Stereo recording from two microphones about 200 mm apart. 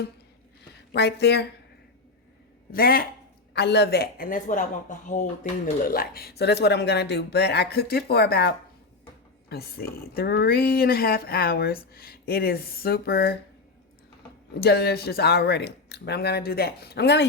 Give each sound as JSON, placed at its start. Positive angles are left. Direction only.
{"t": 0.9, "sound": "speech", "side_deg": 55}
{"t": 2.7, "sound": "speech", "side_deg": 45}
{"t": 5.9, "sound": "speech", "side_deg": 50}
{"t": 14.6, "sound": "speech", "side_deg": 55}